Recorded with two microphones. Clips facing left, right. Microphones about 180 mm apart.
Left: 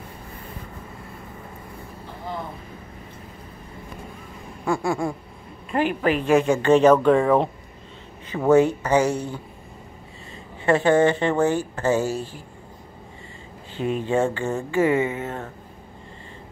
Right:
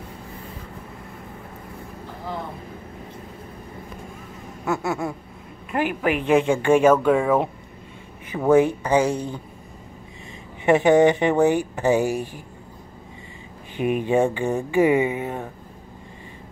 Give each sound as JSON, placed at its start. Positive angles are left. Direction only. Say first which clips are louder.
{"t": 4.6, "sound": "a sound", "louder": "left 1 dB", "side_deg": -5}
{"t": 5.7, "sound": "speech", "louder": "left 1 dB", "side_deg": -10}
{"t": 10.6, "sound": "speech", "louder": "right 2 dB", "side_deg": -15}
{"t": 13.7, "sound": "speech", "louder": "right 2 dB", "side_deg": -15}